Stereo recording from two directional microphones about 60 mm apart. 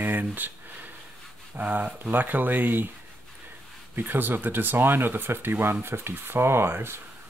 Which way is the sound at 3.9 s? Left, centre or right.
Right.